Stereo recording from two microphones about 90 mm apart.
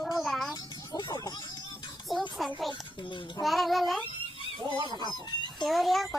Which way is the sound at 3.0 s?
60° left (ahead or behind).